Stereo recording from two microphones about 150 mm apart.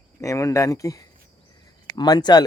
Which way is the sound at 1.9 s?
30° left (ahead or behind).